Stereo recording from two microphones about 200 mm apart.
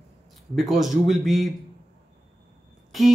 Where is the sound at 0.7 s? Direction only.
Centre (ahead or behind).